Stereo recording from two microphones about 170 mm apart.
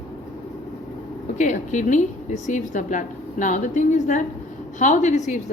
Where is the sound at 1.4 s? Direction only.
45° left (ahead or behind).